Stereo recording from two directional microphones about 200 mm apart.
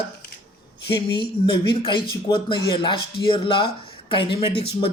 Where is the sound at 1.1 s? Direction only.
25° left (ahead or behind).